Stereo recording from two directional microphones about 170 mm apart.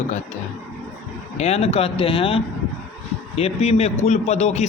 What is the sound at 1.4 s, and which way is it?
A man's voice, 35° left (ahead or behind).